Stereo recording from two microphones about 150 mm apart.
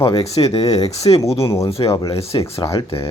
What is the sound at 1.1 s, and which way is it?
Speech, 35° left (ahead or behind).